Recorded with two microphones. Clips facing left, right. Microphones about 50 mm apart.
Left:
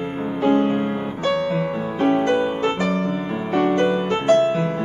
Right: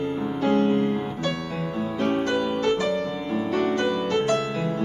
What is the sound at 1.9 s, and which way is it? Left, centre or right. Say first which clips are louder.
Music: left 6 dB; centre.